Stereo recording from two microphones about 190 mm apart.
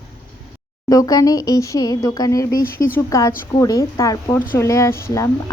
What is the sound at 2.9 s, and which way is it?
Speech, 15° left (ahead or behind).